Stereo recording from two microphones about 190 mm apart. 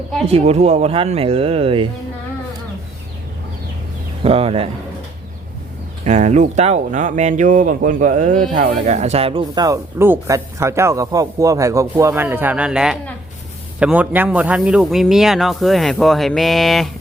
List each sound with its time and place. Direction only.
0.3 s speech: 35° right (ahead or behind)
4.2 s speech: 30° right (ahead or behind)
6.1 s speech: 40° right (ahead or behind); by 16.9 s centre (ahead or behind)